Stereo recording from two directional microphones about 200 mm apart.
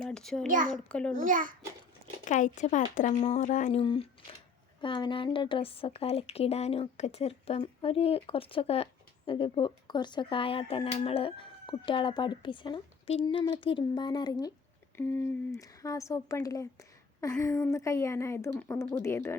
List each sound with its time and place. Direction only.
0.0 s a child's voice: centre (ahead or behind)
0.4 s a child's voice: 40° right (ahead or behind)
0.7 s a child's voice: 5° left (ahead or behind)
1.1 s a child's voice: 40° right (ahead or behind)
2.2 s speech: 40° left (ahead or behind)
3.8 s speech: 25° left (ahead or behind)
14.9 s a woman's voice: 10° left (ahead or behind)